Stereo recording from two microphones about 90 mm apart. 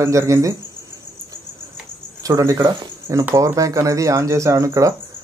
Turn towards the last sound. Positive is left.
turn(degrees=-35)  # may be behind; listen again after turning